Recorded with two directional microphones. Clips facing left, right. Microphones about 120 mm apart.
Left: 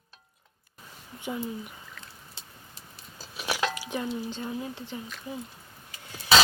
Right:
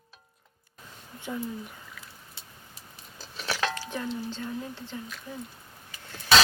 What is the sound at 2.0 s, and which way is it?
Boat, 5° right (ahead or behind).